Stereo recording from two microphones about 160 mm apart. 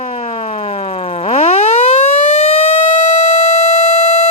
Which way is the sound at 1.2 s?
40° left (ahead or behind).